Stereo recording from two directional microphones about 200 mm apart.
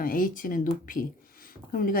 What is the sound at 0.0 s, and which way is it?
Speech, 45° left (ahead or behind).